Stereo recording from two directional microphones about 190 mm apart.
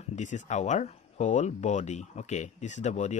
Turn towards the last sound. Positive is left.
turn(degrees=40)  # may be behind; listen again after turning